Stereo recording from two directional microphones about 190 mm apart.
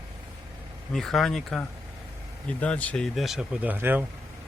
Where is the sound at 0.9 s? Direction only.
Centre (ahead or behind).